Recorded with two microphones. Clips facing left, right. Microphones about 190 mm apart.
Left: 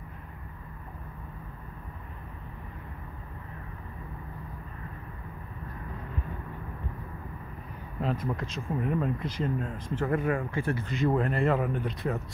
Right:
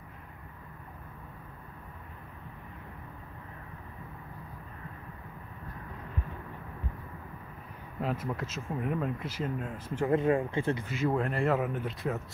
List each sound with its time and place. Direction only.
8.0 s speech: 5° right (ahead or behind)
10.0 s speech: 25° right (ahead or behind)
10.9 s speech: centre (ahead or behind)